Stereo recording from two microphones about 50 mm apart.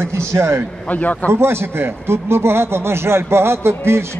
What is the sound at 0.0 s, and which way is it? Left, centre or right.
Speech, right.